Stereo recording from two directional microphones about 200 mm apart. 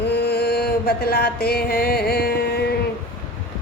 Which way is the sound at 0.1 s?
55° left (ahead or behind).